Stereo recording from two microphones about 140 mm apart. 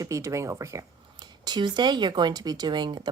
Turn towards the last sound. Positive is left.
turn(degrees=-35)  # may be behind; listen again after turning